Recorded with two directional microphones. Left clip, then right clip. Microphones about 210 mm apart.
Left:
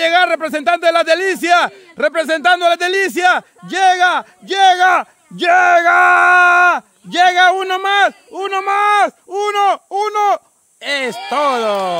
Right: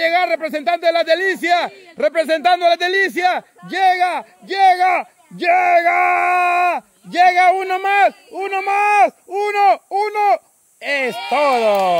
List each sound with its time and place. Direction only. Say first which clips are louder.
0.0 s a man's voice: left 3 dB; 30° left (ahead or behind)